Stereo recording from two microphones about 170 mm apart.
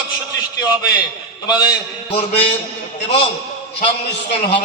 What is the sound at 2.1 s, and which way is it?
Speech, 35° left (ahead or behind).